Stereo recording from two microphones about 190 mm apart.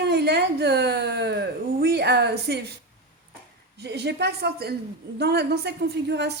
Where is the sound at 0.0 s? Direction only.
60° right (ahead or behind).